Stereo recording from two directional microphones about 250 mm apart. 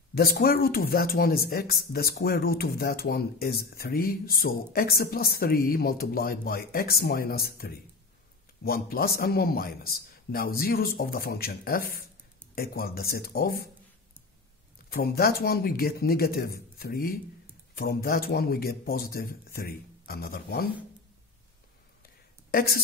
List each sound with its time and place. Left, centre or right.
0.1 s speech: left
14.9 s speech: left
22.5 s speech: left